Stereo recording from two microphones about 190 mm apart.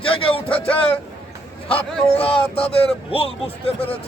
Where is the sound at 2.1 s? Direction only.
30° left (ahead or behind).